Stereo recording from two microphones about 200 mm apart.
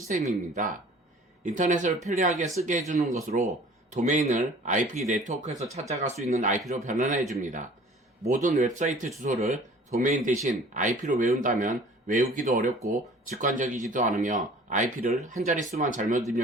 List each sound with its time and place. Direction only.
0.1 s speech: 35° right (ahead or behind)